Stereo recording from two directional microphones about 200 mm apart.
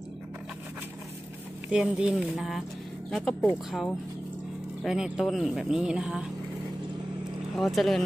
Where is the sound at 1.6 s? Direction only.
5° right (ahead or behind).